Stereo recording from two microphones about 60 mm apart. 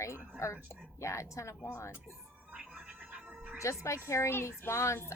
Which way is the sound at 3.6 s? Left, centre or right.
Left.